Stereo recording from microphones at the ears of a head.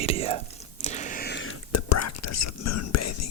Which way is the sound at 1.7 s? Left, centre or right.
Left.